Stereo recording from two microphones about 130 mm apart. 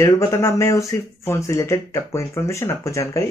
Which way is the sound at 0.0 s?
20° left (ahead or behind).